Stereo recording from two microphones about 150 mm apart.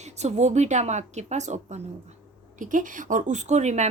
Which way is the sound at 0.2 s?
50° right (ahead or behind).